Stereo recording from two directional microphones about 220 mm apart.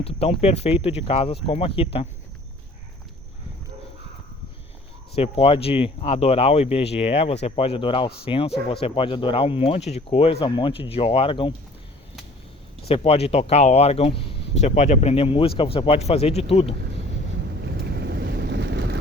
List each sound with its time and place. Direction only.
0.0 s speech: 25° left (ahead or behind)
5.1 s speech: 25° left (ahead or behind)
12.9 s speech: 25° left (ahead or behind)
17.7 s boat: 50° right (ahead or behind)